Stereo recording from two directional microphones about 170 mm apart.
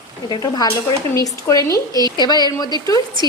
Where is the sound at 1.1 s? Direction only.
20° left (ahead or behind).